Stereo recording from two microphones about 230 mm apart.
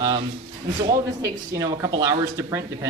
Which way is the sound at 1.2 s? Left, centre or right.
Centre.